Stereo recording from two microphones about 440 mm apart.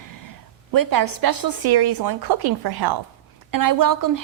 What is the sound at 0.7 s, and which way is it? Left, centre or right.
Speech, right.